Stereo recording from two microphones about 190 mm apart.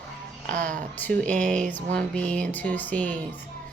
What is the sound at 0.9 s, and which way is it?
Speech, 10° left (ahead or behind).